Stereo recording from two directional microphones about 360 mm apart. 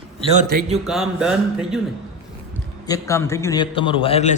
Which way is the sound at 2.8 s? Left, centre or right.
Centre.